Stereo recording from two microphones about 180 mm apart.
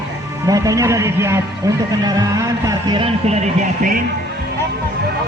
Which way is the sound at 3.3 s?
45° right (ahead or behind).